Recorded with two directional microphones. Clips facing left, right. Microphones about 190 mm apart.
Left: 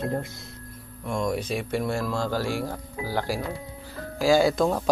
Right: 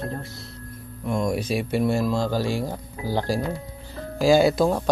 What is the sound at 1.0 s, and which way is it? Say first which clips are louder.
Speech: right 3 dB; 5° right (ahead or behind).